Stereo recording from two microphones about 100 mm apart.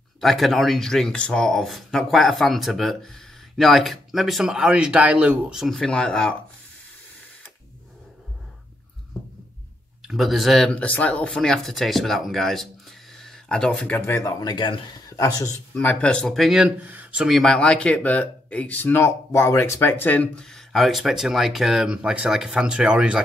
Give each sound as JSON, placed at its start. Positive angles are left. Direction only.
{"t": 0.2, "sound": "speech", "side_deg": 0}
{"t": 10.0, "sound": "speech", "side_deg": 0}
{"t": 10.7, "sound": "speech", "side_deg": 15}
{"t": 13.1, "sound": "a sound", "side_deg": 5}
{"t": 13.9, "sound": "speech", "side_deg": 20}
{"t": 14.2, "sound": "speech", "side_deg": 45}
{"t": 15.7, "sound": "speech", "side_deg": 15}
{"t": 17.3, "sound": "speech", "side_deg": 5}